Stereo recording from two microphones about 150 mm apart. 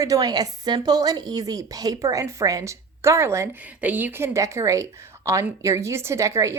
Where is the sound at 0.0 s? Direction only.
25° right (ahead or behind).